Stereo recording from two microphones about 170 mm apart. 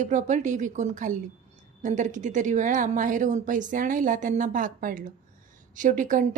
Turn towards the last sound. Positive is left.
turn(degrees=-50)  # may be behind; listen again after turning